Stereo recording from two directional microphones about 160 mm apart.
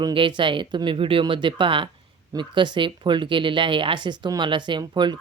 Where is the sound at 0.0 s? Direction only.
30° right (ahead or behind).